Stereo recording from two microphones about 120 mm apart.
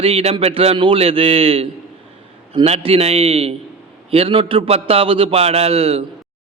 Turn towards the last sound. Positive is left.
turn(degrees=-55)  # may be behind; listen again after turning